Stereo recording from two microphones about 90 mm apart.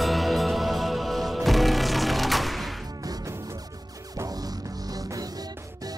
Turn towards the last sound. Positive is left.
turn(degrees=-40)  # may be behind; listen again after turning